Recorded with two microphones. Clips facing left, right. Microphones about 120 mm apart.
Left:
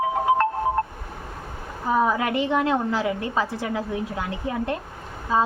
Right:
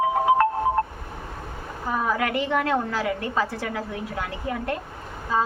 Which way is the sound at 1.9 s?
25° left (ahead or behind).